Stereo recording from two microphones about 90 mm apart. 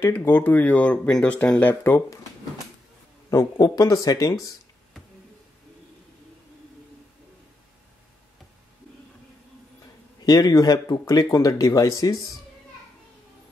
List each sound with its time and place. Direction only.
0.0 s speech: 25° left (ahead or behind)
3.3 s speech: 40° left (ahead or behind)
10.2 s speech: 45° left (ahead or behind)